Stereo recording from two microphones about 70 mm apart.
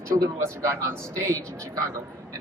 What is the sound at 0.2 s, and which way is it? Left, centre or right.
A man's voice, right.